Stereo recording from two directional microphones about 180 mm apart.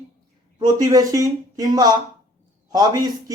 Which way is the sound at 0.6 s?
20° right (ahead or behind).